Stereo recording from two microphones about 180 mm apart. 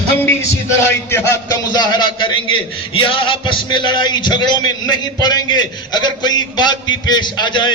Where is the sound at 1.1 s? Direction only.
15° left (ahead or behind).